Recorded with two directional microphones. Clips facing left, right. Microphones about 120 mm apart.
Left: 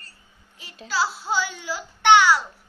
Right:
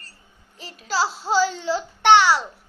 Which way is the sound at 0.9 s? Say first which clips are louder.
Right 3 dB; 35° right (ahead or behind).